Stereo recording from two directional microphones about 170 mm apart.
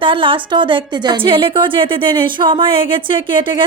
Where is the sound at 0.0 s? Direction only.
30° right (ahead or behind).